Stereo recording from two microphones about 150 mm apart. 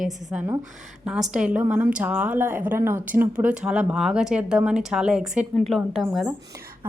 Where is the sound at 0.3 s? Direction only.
10° right (ahead or behind).